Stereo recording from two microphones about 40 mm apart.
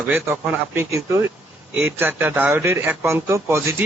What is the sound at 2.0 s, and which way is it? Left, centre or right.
A man's voice, right.